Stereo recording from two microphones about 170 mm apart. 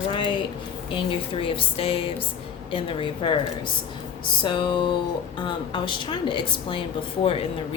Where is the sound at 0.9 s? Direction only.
30° left (ahead or behind).